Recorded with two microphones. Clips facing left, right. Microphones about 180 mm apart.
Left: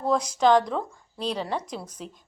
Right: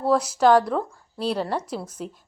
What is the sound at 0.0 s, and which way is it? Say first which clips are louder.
A woman's voice: right 3 dB; 5° right (ahead or behind).